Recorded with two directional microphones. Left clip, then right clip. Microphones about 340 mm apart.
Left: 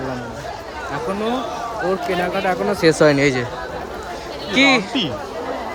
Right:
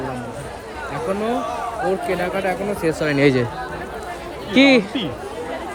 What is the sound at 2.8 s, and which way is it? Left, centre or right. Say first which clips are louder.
Speech: left 10 dB; left.